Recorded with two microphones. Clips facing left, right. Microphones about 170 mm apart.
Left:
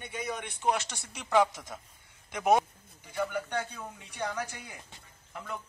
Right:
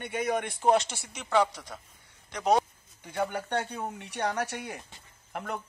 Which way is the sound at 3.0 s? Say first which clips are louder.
Right 1 dB; 55° right (ahead or behind).